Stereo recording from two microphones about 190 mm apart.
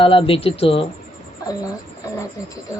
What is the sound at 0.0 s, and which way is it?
Speech, 30° left (ahead or behind).